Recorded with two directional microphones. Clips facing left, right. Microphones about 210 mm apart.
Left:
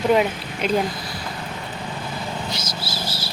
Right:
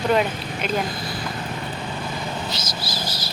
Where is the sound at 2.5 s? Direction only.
25° left (ahead or behind).